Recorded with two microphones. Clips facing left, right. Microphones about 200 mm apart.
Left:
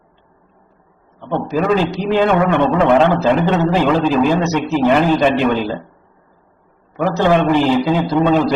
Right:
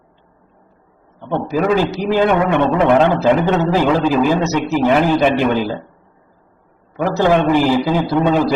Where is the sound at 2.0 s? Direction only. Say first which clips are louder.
Left 1 dB; 15° right (ahead or behind).